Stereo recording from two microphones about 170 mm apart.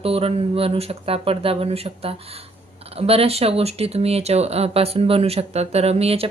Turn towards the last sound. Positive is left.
turn(degrees=-35)  # may be behind; listen again after turning